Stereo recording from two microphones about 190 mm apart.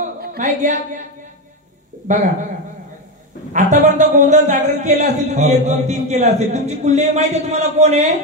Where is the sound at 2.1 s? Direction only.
40° right (ahead or behind).